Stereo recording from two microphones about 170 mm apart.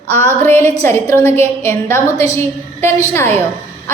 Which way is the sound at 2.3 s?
15° left (ahead or behind).